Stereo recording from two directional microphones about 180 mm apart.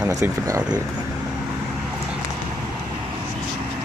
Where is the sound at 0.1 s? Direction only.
20° right (ahead or behind).